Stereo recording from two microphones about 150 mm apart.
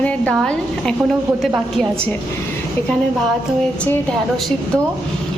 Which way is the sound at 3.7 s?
10° left (ahead or behind).